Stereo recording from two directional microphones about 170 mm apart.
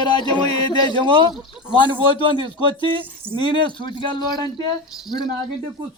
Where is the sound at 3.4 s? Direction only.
30° left (ahead or behind).